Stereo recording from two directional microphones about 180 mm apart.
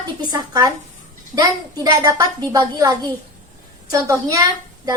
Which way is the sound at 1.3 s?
20° right (ahead or behind).